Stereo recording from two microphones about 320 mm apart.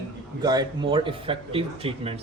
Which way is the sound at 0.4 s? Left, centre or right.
Centre.